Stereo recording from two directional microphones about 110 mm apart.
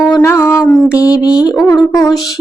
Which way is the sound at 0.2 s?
20° left (ahead or behind).